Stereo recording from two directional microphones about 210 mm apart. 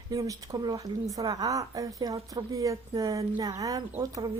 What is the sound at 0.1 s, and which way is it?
A woman's voice, 15° right (ahead or behind).